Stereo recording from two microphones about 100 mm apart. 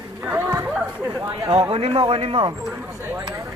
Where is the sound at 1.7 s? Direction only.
75° right (ahead or behind).